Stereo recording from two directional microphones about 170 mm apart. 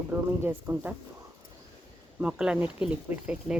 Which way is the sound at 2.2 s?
5° right (ahead or behind).